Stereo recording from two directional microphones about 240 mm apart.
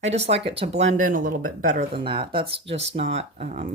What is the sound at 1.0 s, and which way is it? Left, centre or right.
Speech, right.